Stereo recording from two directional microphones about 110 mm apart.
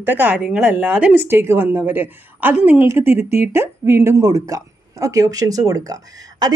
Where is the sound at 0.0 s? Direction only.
15° right (ahead or behind).